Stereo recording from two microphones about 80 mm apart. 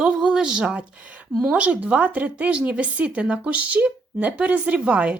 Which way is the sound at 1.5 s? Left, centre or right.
Centre.